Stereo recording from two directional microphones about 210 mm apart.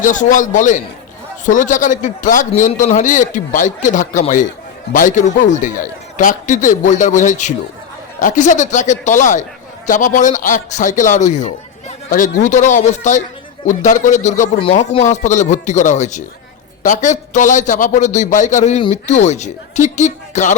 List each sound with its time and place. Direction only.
0.0 s a man's voice: 35° left (ahead or behind)